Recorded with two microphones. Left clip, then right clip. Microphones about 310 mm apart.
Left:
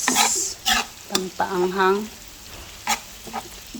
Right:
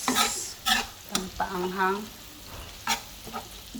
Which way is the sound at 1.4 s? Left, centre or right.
Left.